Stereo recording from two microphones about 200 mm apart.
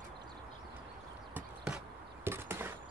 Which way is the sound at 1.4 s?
5° right (ahead or behind).